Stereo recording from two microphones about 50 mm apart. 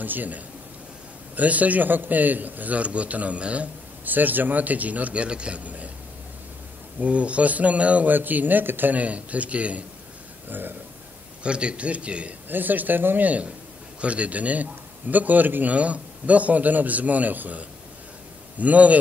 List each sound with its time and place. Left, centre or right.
0.0 s a man's voice: right
4.0 s a man's voice: right
7.0 s speech: right
8.1 s a man's voice: right
11.4 s speech: right
12.4 s a man's voice: right